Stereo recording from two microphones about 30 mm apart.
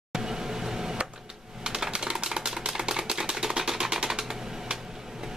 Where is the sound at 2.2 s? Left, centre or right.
Centre.